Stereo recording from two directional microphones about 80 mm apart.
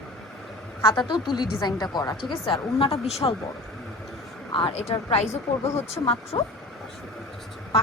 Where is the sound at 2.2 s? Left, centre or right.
Left.